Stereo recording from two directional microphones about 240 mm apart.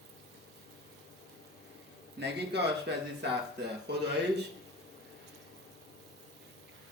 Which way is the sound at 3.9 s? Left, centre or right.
Right.